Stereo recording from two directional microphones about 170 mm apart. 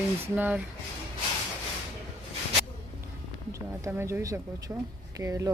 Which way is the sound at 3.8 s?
15° right (ahead or behind).